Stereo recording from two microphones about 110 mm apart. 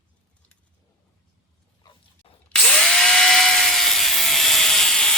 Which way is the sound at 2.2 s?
55° left (ahead or behind).